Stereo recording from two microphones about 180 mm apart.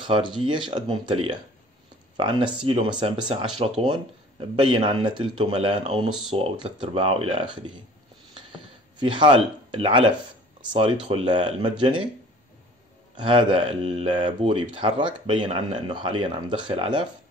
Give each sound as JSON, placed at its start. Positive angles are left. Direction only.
{"t": 0.0, "sound": "speech", "side_deg": -25}
{"t": 13.1, "sound": "speech", "side_deg": -25}